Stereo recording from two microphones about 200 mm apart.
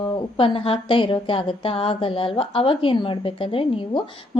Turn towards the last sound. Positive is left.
turn(degrees=25)  # may be behind; listen again after turning